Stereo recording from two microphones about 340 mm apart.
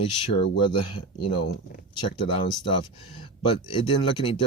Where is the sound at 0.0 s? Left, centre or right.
Centre.